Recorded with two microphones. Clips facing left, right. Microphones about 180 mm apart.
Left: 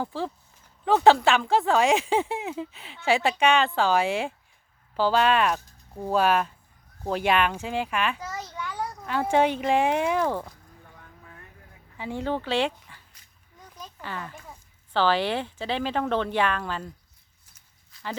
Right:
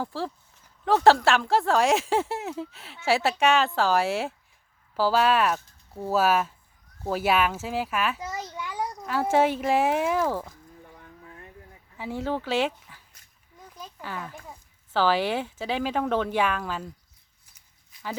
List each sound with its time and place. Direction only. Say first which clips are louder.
0.0 s speech: left 1 dB; centre (ahead or behind)
8.2 s a child's voice: right 1 dB; 15° right (ahead or behind)
11.9 s a child's voice: even; 5° right (ahead or behind)